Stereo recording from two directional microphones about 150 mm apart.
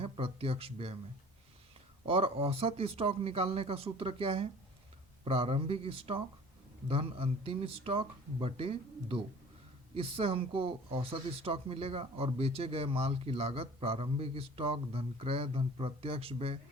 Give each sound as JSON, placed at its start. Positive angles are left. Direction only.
{"t": 0.0, "sound": "speech", "side_deg": -40}
{"t": 2.0, "sound": "speech", "side_deg": -40}